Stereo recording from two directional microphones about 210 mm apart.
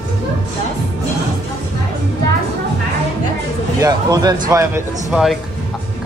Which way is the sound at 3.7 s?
15° right (ahead or behind).